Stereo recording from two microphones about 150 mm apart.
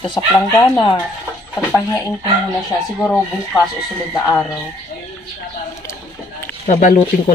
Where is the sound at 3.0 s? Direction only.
10° left (ahead or behind).